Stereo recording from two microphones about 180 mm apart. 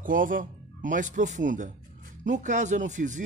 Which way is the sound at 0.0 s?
50° right (ahead or behind).